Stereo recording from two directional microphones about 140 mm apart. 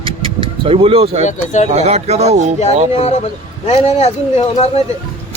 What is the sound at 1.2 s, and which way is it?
Speech, 60° left (ahead or behind).